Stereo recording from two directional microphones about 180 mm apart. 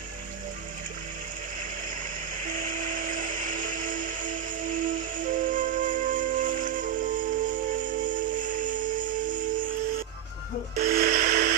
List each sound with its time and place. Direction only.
2.4 s music: 45° right (ahead or behind)
10.9 s music: 55° right (ahead or behind)